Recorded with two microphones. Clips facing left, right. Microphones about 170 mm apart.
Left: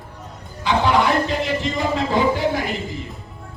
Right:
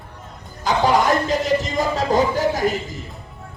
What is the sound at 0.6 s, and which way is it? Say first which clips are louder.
Speech: even; 40° right (ahead or behind).